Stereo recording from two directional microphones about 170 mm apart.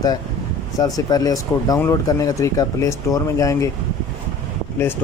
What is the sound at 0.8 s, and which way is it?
A man's voice, 20° left (ahead or behind).